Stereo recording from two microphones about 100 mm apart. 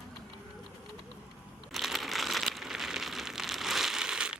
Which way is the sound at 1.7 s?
Centre (ahead or behind).